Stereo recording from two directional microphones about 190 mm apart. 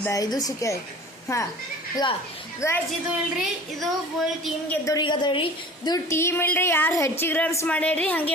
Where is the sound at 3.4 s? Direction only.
Centre (ahead or behind).